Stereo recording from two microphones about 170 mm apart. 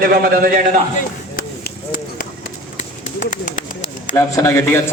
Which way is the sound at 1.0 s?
60° left (ahead or behind).